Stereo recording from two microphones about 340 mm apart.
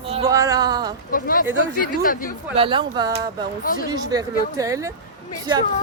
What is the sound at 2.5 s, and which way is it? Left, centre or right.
Speech, centre.